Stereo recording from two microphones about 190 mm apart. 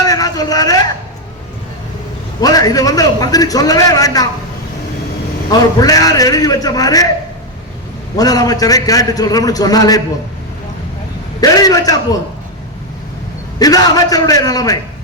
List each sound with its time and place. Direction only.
0.0 s a sound: 20° left (ahead or behind)
2.4 s a man's voice: 20° left (ahead or behind)
5.5 s a man's voice: 20° left (ahead or behind)
8.1 s a man's voice: 20° left (ahead or behind)
11.3 s a man's voice: 20° left (ahead or behind)
13.6 s a man's voice: 20° left (ahead or behind)